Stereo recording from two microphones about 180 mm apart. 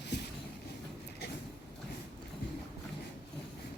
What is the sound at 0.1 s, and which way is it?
Train, 70° left (ahead or behind).